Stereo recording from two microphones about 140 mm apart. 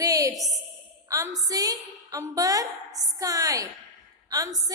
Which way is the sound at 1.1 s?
25° right (ahead or behind).